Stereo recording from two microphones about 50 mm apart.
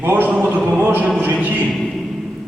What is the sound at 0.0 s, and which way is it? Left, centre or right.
Speech, right.